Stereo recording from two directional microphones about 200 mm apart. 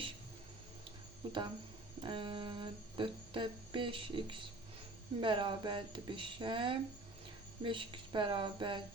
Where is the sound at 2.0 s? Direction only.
25° right (ahead or behind).